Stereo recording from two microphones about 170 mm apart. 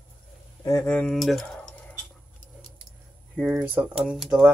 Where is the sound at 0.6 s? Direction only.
20° left (ahead or behind).